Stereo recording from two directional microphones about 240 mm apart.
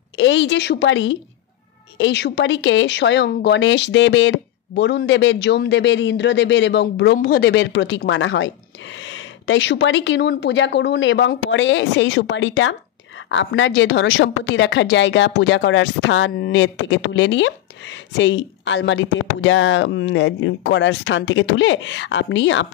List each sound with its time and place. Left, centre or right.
0.2 s speech: left